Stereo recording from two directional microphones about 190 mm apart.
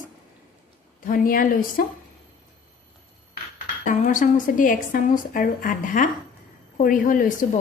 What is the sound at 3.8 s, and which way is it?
A woman's voice, 45° left (ahead or behind).